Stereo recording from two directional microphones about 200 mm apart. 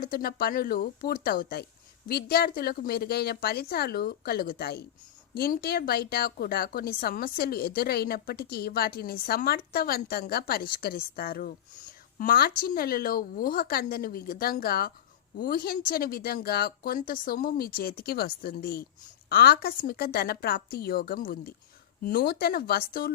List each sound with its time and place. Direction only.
0.0 s a woman's voice: 45° left (ahead or behind)